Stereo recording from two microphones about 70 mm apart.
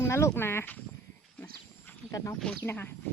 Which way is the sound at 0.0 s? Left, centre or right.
Left.